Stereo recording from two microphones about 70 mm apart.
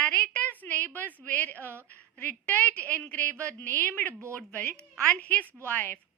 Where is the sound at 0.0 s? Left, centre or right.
Left.